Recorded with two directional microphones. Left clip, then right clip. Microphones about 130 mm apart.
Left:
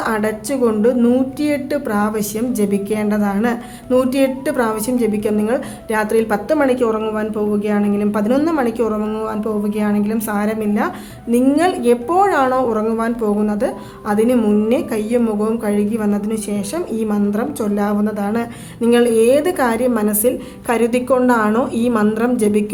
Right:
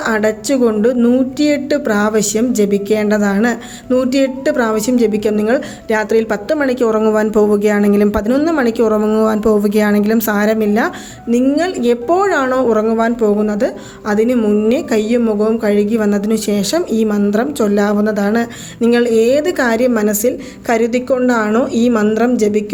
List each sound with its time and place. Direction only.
0.0 s a woman's voice: 25° right (ahead or behind)
0.9 s a woman's voice: 15° right (ahead or behind)
1.4 s a woman's voice: 25° right (ahead or behind)
3.8 s a woman's voice: 20° right (ahead or behind); by 9.2 s 40° right (ahead or behind)
9.2 s a woman's voice: 60° right (ahead or behind); by 10.9 s 35° right (ahead or behind)
11.5 s a woman's voice: 25° right (ahead or behind)
15.2 s a woman's voice: 20° right (ahead or behind); by 18.9 s 35° right (ahead or behind)
18.9 s a woman's voice: 20° right (ahead or behind)